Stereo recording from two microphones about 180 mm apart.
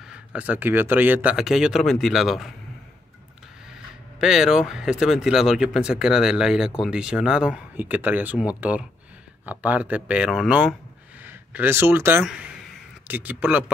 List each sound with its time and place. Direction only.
0.1 s speech: 5° right (ahead or behind)
4.2 s speech: 5° right (ahead or behind)